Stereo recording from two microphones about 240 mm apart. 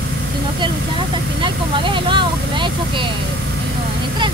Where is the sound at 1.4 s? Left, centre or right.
Centre.